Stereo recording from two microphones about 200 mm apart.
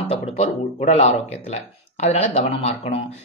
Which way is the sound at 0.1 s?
35° left (ahead or behind).